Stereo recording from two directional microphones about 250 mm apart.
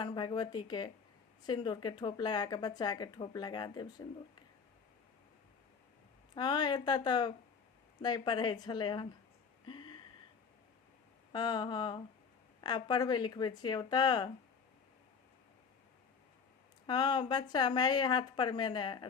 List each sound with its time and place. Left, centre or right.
0.0 s speech: centre
6.3 s speech: centre
9.6 s a sound: centre
11.3 s speech: centre
16.8 s speech: centre